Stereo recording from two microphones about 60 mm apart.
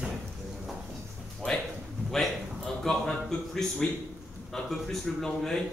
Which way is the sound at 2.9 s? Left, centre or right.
Centre.